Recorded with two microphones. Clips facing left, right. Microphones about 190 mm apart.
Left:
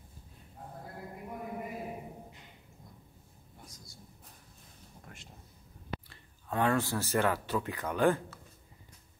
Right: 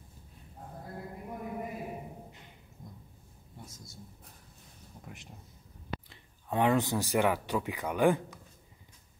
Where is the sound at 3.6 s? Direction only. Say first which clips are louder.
Right 3 dB; 25° right (ahead or behind).